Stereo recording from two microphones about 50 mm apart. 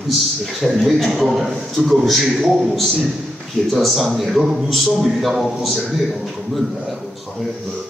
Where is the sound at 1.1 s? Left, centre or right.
Centre.